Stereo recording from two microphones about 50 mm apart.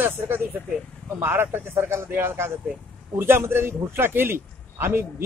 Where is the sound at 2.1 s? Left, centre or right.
Right.